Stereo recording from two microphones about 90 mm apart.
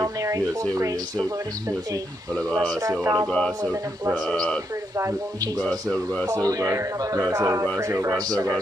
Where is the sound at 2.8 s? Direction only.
40° right (ahead or behind).